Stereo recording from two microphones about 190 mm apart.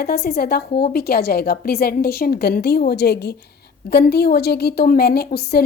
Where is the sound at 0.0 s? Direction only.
55° left (ahead or behind).